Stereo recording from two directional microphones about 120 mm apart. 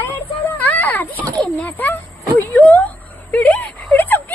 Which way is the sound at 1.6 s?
15° left (ahead or behind).